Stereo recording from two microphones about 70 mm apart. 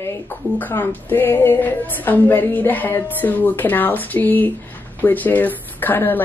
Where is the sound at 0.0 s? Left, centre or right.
Left.